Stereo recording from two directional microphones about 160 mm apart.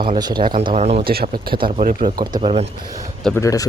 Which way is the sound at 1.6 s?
60° right (ahead or behind).